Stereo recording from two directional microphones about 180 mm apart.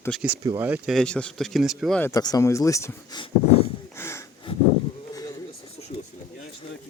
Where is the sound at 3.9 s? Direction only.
15° left (ahead or behind).